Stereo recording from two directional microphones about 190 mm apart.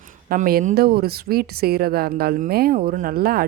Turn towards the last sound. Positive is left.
turn(degrees=-50)  # may be behind; listen again after turning